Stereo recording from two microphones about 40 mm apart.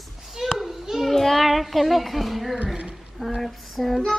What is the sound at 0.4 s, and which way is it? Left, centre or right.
Children playing, centre.